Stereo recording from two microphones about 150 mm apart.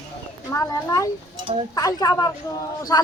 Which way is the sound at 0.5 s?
25° left (ahead or behind).